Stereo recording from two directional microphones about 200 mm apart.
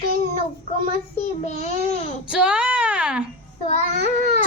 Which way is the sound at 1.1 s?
30° left (ahead or behind).